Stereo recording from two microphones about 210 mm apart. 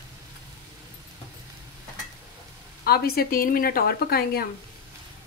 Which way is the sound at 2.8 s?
45° left (ahead or behind).